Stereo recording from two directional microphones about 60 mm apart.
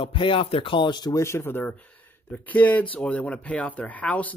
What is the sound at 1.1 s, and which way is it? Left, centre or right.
Speech, left.